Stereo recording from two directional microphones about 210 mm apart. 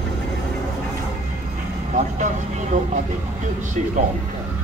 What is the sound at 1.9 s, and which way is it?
Vehicle, 35° right (ahead or behind).